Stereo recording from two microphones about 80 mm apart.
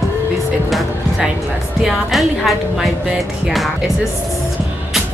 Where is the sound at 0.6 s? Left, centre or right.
Centre.